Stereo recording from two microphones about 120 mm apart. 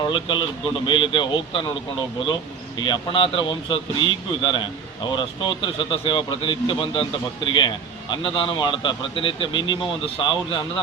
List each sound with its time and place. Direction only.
0.1 s speech: 40° left (ahead or behind)